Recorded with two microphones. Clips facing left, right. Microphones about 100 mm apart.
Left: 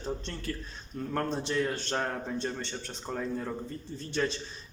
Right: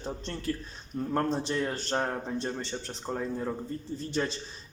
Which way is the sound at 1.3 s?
30° right (ahead or behind).